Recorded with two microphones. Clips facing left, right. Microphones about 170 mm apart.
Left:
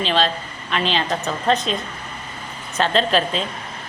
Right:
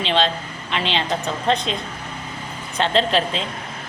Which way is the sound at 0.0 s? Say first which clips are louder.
Even; 25° right (ahead or behind).